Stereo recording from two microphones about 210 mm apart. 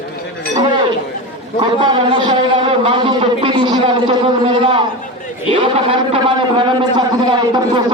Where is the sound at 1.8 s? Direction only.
20° right (ahead or behind).